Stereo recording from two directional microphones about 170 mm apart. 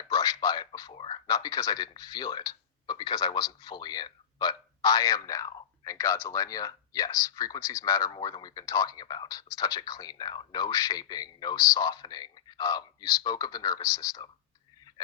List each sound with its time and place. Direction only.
0.0 s a sound: 20° left (ahead or behind)
0.4 s speech: 25° left (ahead or behind)
1.3 s speech: 20° left (ahead or behind)